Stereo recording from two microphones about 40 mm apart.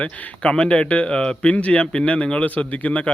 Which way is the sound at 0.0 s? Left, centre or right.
Left.